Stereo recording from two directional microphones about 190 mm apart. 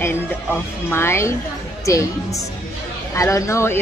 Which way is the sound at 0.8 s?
15° left (ahead or behind).